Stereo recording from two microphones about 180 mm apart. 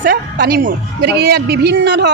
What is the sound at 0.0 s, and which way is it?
A woman's voice, 50° right (ahead or behind).